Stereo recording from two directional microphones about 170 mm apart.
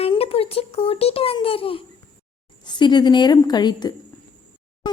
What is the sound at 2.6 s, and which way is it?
A woman's voice, 25° left (ahead or behind).